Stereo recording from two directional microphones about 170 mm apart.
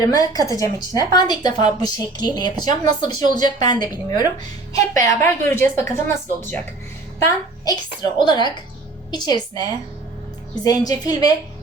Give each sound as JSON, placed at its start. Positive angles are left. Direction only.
{"t": 0.0, "sound": "a woman's voice", "side_deg": 20}
{"t": 5.0, "sound": "a woman's voice", "side_deg": 15}